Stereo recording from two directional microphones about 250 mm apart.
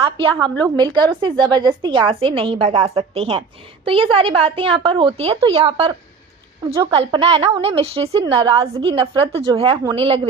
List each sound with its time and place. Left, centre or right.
0.6 s a woman's voice: centre